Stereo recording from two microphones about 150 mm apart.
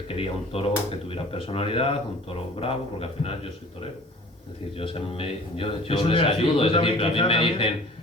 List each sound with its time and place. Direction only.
0.1 s a man's voice: 40° left (ahead or behind)
4.8 s a man's voice: 40° left (ahead or behind)